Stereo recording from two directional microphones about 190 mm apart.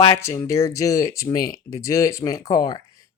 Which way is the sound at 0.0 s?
15° left (ahead or behind).